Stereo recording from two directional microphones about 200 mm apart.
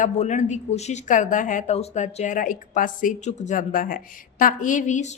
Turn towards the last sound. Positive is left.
turn(degrees=35)  # may be behind; listen again after turning